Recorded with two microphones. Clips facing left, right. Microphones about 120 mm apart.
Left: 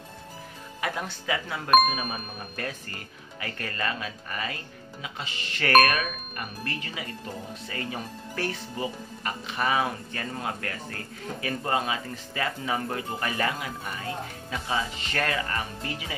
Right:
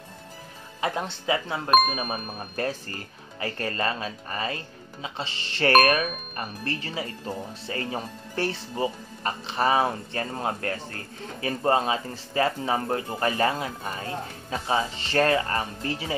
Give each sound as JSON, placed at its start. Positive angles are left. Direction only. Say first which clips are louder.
{"t": 0.7, "sound": "speech", "louder": "right 3 dB", "side_deg": -25}